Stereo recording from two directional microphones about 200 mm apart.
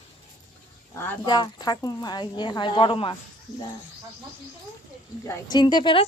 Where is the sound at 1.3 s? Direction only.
20° left (ahead or behind).